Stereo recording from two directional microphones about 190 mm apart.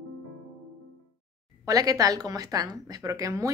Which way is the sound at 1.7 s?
20° right (ahead or behind).